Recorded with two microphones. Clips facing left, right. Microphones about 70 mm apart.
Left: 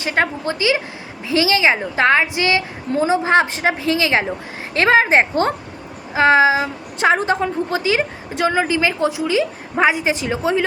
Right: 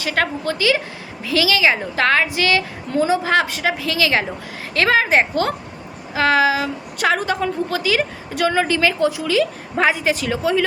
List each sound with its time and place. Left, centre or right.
0.0 s a woman's voice: left